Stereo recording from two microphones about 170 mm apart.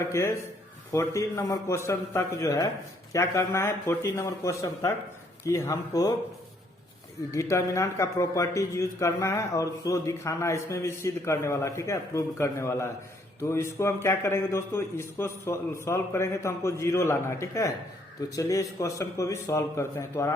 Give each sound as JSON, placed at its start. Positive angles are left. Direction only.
{"t": 0.1, "sound": "a man's voice", "side_deg": 15}
{"t": 7.3, "sound": "a man's voice", "side_deg": 15}